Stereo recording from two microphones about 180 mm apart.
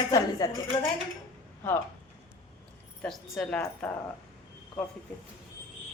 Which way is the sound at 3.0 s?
5° left (ahead or behind).